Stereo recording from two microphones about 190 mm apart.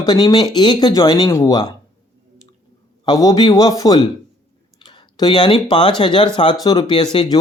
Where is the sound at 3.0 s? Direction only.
20° left (ahead or behind).